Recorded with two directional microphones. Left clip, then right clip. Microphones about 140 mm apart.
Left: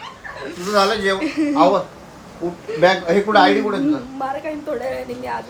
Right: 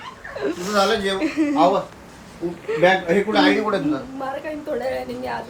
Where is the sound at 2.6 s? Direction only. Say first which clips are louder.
Left 2 dB; 15° left (ahead or behind).